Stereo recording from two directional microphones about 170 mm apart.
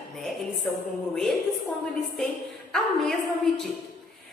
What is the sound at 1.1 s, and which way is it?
Speech, centre (ahead or behind).